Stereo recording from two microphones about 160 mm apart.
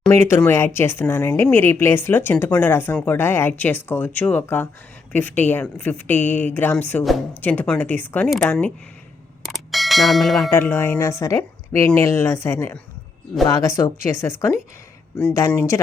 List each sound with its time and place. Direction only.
0.1 s speech: 15° left (ahead or behind)
9.4 s bell: centre (ahead or behind)
10.5 s a woman's voice: 15° left (ahead or behind)